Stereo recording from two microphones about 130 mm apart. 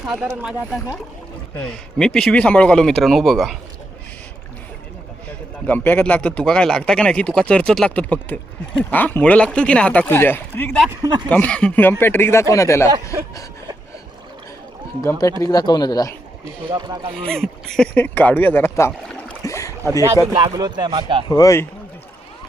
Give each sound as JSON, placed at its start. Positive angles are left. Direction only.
{"t": 0.0, "sound": "speech", "side_deg": -10}
{"t": 1.6, "sound": "a man's voice", "side_deg": 5}
{"t": 5.6, "sound": "speech", "side_deg": 15}
{"t": 15.2, "sound": "speech", "side_deg": 25}
{"t": 16.6, "sound": "speech", "side_deg": -30}
{"t": 17.2, "sound": "a man's voice", "side_deg": 5}
{"t": 18.9, "sound": "boat", "side_deg": 5}
{"t": 19.4, "sound": "rowboat", "side_deg": 25}
{"t": 20.3, "sound": "speech", "side_deg": -35}
{"t": 21.2, "sound": "speech", "side_deg": 30}